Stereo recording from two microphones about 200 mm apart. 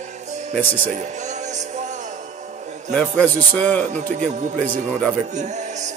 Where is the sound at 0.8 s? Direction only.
35° right (ahead or behind).